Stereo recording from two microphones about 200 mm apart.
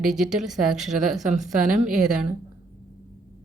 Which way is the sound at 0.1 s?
Centre (ahead or behind).